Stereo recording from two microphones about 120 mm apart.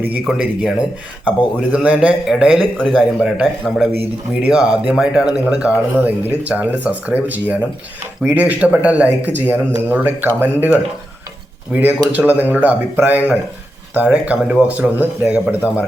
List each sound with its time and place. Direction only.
0.0 s a man's voice: 10° right (ahead or behind)